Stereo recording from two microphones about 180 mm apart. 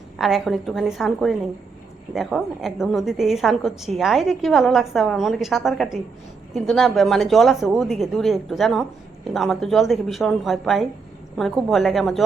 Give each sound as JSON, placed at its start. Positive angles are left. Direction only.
{"t": 0.2, "sound": "a woman's voice", "side_deg": 0}